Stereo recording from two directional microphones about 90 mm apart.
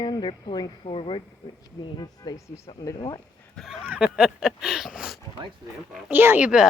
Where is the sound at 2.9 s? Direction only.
45° left (ahead or behind).